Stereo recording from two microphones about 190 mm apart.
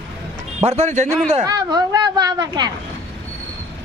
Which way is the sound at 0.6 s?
35° right (ahead or behind).